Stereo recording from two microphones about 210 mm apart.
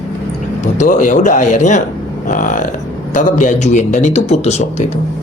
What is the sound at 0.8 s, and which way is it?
A man's voice, 35° left (ahead or behind).